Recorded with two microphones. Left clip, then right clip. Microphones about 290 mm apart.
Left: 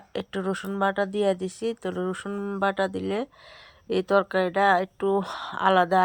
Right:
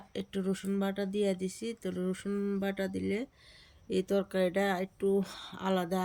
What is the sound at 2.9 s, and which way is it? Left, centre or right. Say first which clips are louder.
Speech: left 6 dB; centre.